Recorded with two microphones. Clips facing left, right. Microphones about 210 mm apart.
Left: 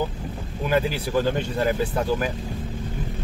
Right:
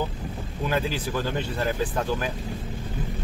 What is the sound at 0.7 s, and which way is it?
Speech, 15° left (ahead or behind).